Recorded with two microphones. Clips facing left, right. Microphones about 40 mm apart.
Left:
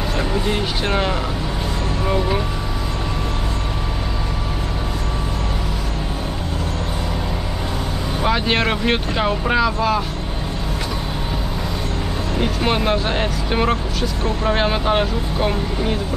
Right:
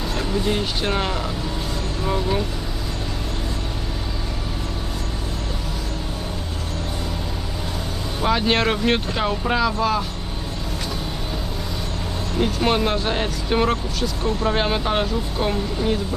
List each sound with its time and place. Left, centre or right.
0.2 s speech: centre
8.2 s speech: centre
12.4 s speech: centre